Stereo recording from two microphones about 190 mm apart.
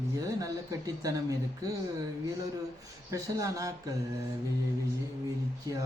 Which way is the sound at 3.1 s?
15° right (ahead or behind).